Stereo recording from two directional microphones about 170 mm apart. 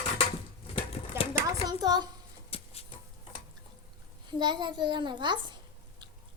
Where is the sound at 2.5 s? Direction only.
35° left (ahead or behind).